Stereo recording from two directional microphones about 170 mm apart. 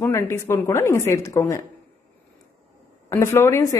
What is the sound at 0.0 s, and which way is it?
A woman's voice, 15° left (ahead or behind).